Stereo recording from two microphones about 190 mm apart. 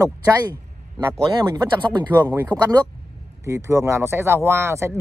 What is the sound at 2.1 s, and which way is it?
Speech, 10° right (ahead or behind).